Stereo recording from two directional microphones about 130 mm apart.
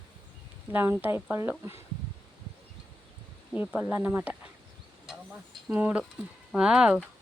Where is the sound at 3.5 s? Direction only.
10° right (ahead or behind).